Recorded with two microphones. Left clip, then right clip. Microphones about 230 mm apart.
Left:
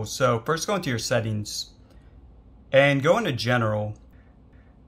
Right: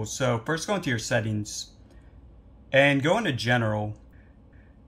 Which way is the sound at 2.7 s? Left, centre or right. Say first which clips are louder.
Left 2 dB; left.